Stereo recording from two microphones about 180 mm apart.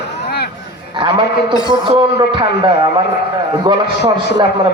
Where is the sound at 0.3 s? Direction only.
60° left (ahead or behind).